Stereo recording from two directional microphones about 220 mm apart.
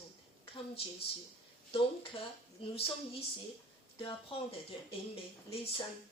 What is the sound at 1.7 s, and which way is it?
A woman's voice, 25° left (ahead or behind).